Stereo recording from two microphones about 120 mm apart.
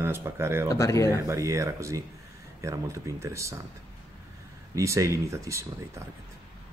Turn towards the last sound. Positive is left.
turn(degrees=-25)  # may be behind; listen again after turning